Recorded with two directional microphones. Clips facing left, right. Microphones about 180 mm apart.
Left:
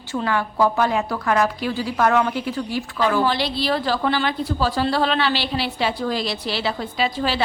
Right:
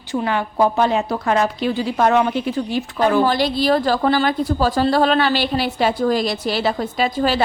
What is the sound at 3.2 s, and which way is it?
A woman's voice, 45° right (ahead or behind).